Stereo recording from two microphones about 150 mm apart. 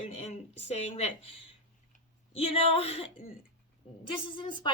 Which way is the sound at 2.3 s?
40° left (ahead or behind).